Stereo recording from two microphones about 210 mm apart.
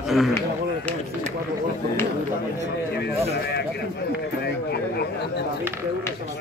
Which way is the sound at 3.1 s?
30° right (ahead or behind).